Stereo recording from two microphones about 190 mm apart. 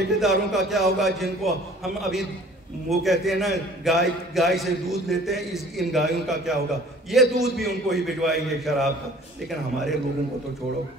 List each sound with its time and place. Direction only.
0.2 s a man's voice: centre (ahead or behind)